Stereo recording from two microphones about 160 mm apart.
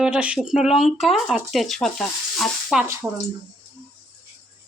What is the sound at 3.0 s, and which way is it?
Speech, 20° right (ahead or behind).